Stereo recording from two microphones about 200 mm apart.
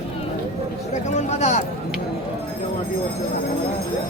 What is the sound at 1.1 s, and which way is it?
Speech, 35° left (ahead or behind).